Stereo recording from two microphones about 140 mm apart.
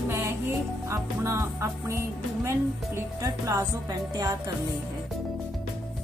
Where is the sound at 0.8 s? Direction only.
20° right (ahead or behind).